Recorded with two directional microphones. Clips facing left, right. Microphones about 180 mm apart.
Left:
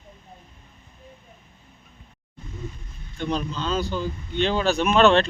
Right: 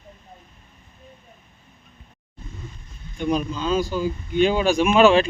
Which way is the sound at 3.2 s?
10° right (ahead or behind).